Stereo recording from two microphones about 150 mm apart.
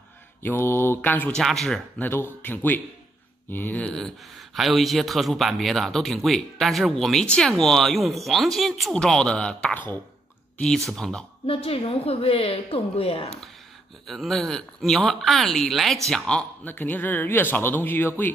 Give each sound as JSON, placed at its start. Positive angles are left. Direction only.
{"t": 0.4, "sound": "speech", "side_deg": 15}
{"t": 2.0, "sound": "speech", "side_deg": 15}
{"t": 11.4, "sound": "a woman's voice", "side_deg": 40}
{"t": 14.0, "sound": "speech", "side_deg": 0}